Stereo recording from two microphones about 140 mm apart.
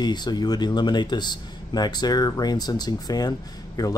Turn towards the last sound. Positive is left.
turn(degrees=25)  # may be behind; listen again after turning